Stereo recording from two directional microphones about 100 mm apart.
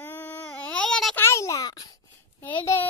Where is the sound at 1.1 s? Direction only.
25° left (ahead or behind).